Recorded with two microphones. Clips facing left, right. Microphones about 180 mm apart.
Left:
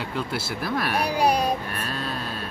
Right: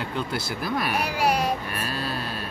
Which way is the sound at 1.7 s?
5° right (ahead or behind).